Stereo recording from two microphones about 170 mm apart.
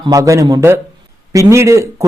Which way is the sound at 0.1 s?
20° right (ahead or behind).